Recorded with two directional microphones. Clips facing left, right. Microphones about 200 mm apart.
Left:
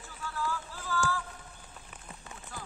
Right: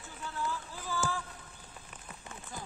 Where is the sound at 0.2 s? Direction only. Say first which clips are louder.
Left 2 dB; 20° right (ahead or behind).